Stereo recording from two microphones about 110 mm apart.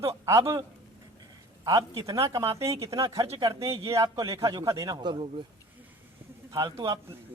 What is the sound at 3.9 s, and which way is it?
A man's voice, 30° right (ahead or behind).